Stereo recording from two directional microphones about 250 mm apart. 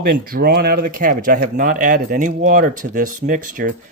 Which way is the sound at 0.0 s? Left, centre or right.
Right.